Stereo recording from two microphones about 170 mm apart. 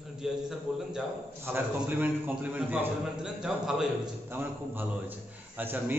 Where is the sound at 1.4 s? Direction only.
10° right (ahead or behind).